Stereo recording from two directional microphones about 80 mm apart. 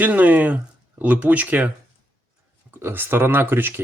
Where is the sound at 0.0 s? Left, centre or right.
Right.